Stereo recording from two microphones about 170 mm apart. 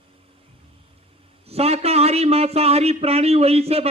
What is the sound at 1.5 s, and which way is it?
Speech, 35° right (ahead or behind).